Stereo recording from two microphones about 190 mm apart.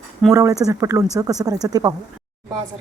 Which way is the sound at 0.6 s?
15° right (ahead or behind).